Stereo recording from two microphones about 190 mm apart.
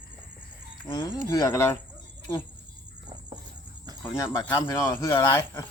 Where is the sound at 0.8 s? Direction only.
20° left (ahead or behind).